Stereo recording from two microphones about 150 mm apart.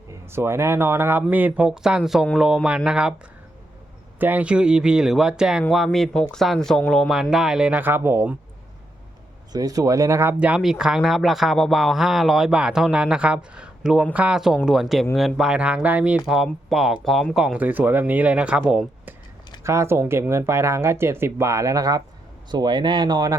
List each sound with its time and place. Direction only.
0.3 s speech: 15° right (ahead or behind)
4.2 s speech: 10° right (ahead or behind)
9.5 s speech: 25° right (ahead or behind); by 19.1 s 5° right (ahead or behind)
19.6 s speech: 20° right (ahead or behind)